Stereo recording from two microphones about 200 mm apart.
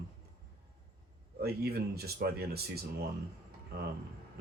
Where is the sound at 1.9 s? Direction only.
50° right (ahead or behind).